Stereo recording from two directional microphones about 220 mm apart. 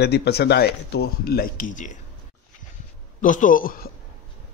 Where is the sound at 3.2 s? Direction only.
35° left (ahead or behind).